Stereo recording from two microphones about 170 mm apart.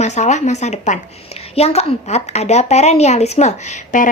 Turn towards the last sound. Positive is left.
turn(degrees=45)  # may be behind; listen again after turning